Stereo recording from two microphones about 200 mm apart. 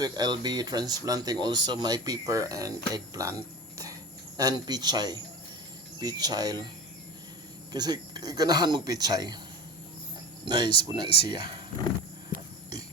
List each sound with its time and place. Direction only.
0.0 s speech: 20° right (ahead or behind)
4.4 s speech: 20° right (ahead or behind)
7.7 s speech: 20° right (ahead or behind)
10.4 s speech: 20° right (ahead or behind)